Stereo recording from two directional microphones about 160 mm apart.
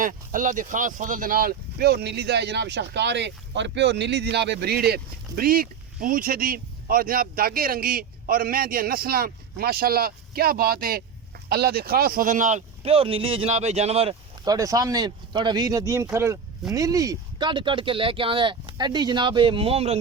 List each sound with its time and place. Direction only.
0.0 s speech: 55° right (ahead or behind); by 4.9 s 90° right
5.4 s speech: 65° right (ahead or behind); by 14.2 s 40° right (ahead or behind)
14.4 s speech: 20° right (ahead or behind); by 20.0 s 40° right (ahead or behind)